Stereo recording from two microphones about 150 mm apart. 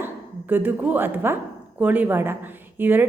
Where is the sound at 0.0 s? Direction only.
15° right (ahead or behind).